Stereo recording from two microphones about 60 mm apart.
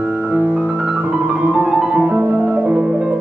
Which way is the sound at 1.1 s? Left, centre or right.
Right.